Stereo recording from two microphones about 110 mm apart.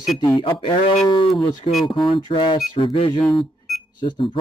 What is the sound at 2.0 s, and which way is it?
Speech, 50° left (ahead or behind).